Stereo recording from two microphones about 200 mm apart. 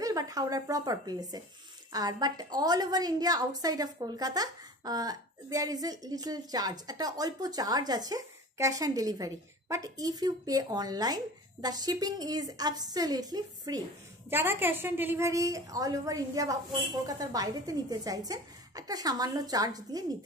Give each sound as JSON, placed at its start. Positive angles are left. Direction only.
{"t": 0.0, "sound": "a woman's voice", "side_deg": -15}